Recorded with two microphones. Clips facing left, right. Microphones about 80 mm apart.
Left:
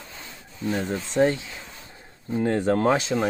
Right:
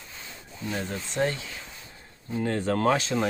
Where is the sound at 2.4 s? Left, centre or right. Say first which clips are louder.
Left 4 dB; left.